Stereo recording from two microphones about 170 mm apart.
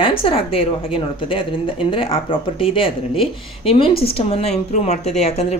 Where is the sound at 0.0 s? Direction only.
30° left (ahead or behind).